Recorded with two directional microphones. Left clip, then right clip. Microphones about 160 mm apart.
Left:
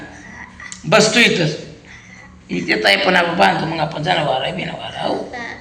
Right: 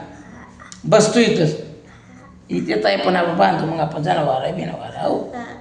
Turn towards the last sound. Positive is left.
turn(degrees=-35)  # may be behind; listen again after turning